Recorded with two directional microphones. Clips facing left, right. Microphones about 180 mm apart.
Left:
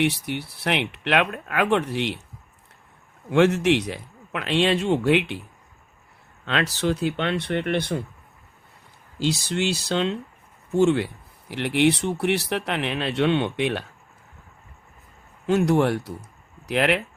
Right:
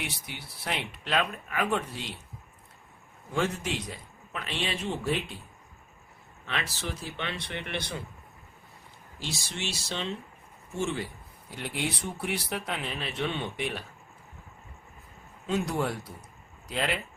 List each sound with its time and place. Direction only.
0.0 s speech: 65° left (ahead or behind)
3.2 s speech: 75° left (ahead or behind)
6.4 s speech: 85° left; by 8.0 s 55° left (ahead or behind)
9.1 s speech: 90° left
15.4 s speech: 70° left (ahead or behind)